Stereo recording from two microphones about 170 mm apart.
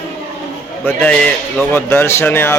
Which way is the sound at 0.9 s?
10° left (ahead or behind).